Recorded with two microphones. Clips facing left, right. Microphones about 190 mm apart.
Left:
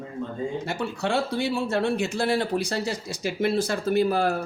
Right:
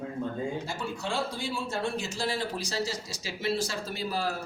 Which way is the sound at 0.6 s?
65° left (ahead or behind).